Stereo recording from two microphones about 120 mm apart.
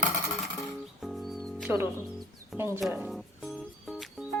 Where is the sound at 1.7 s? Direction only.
5° right (ahead or behind).